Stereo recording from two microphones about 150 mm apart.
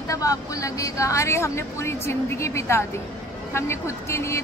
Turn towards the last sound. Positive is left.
turn(degrees=20)  # may be behind; listen again after turning